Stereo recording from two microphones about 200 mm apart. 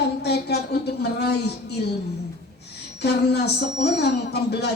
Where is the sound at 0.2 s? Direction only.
55° left (ahead or behind).